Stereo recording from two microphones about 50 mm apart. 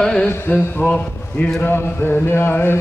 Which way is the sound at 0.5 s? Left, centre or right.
Left.